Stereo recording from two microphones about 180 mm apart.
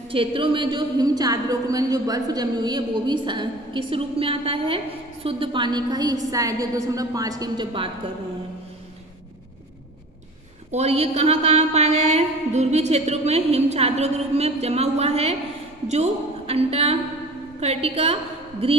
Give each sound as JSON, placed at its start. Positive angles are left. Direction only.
{"t": 0.1, "sound": "a woman's voice", "side_deg": -30}
{"t": 10.7, "sound": "a woman's voice", "side_deg": -35}